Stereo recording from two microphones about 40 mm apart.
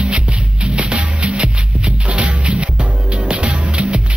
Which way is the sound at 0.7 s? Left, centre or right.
Right.